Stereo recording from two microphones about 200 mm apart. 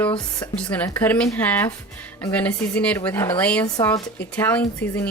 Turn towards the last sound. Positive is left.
turn(degrees=10)  # may be behind; listen again after turning